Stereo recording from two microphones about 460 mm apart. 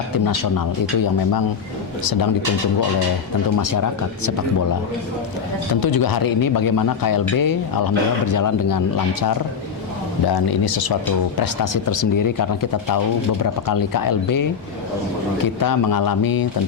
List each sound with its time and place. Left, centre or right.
3.6 s speech: left
5.8 s a man's voice: left
10.2 s a man's voice: left
15.6 s a man's voice: left